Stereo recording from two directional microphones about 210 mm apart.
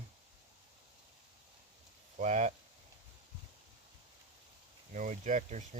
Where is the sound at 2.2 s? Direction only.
35° right (ahead or behind).